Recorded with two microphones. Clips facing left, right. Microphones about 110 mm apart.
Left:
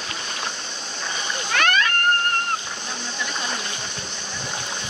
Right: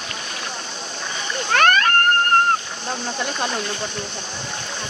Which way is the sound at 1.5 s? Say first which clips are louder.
Right 5 dB; 45° right (ahead or behind).